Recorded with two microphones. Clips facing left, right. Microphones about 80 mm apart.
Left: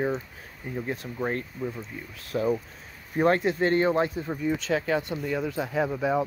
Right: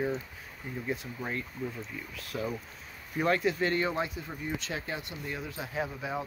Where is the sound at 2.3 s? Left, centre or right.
Left.